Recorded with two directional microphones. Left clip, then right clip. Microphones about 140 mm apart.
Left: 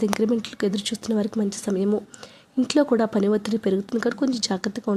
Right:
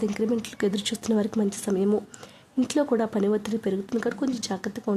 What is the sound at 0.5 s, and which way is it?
A woman's voice, 10° left (ahead or behind).